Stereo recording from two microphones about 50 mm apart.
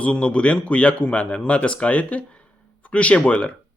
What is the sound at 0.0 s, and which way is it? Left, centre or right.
Speech, left.